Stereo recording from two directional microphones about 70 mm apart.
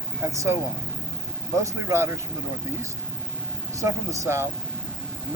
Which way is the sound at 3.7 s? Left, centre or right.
Right.